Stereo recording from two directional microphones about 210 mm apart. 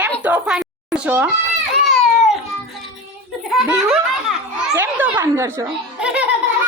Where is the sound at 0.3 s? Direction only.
5° right (ahead or behind).